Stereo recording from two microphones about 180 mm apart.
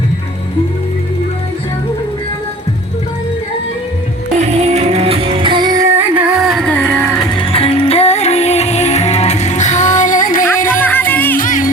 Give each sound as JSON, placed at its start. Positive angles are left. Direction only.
{"t": 4.4, "sound": "music", "side_deg": -35}
{"t": 7.3, "sound": "music", "side_deg": 35}
{"t": 10.7, "sound": "music", "side_deg": 10}
{"t": 11.3, "sound": "music", "side_deg": 50}